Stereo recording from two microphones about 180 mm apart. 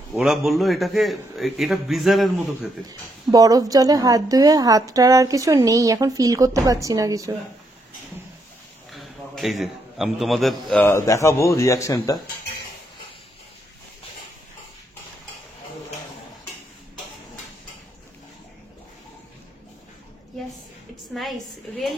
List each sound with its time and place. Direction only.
0.1 s a man's voice: centre (ahead or behind)
2.9 s a woman's voice: 20° right (ahead or behind)
8.9 s a man's voice: centre (ahead or behind); by 12.2 s 20° left (ahead or behind)
21.1 s a woman's voice: centre (ahead or behind)